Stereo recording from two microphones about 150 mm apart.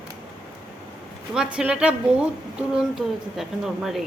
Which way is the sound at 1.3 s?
5° right (ahead or behind).